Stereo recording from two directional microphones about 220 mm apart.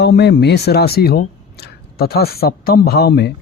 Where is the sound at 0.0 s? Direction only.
50° left (ahead or behind).